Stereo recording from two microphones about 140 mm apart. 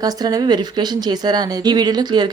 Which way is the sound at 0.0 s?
25° right (ahead or behind).